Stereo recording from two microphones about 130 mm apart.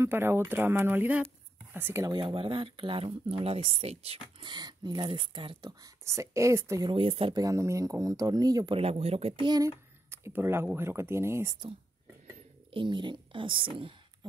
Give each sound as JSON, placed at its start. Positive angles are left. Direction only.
{"t": 0.0, "sound": "speech", "side_deg": -15}
{"t": 2.0, "sound": "speech", "side_deg": -40}
{"t": 4.5, "sound": "speech", "side_deg": -35}
{"t": 6.9, "sound": "speech", "side_deg": -45}
{"t": 7.3, "sound": "speech", "side_deg": -25}
{"t": 8.7, "sound": "speech", "side_deg": -50}
{"t": 9.5, "sound": "speech", "side_deg": -25}
{"t": 12.7, "sound": "speech", "side_deg": -40}